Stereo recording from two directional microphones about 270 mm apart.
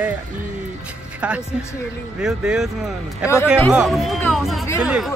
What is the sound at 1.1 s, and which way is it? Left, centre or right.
Speech, centre.